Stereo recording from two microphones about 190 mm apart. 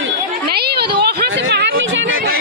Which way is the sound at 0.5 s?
55° right (ahead or behind).